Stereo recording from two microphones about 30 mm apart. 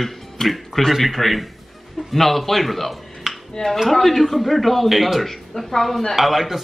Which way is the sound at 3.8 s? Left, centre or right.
Centre.